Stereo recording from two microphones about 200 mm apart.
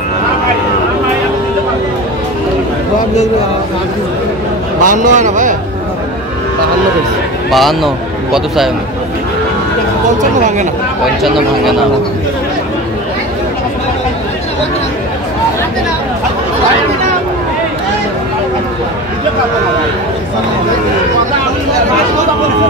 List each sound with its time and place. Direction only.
4.8 s speech: 40° right (ahead or behind)
7.5 s speech: centre (ahead or behind)
11.2 s speech: centre (ahead or behind)